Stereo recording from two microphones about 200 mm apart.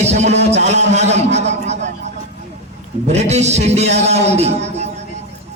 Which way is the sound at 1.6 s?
35° right (ahead or behind).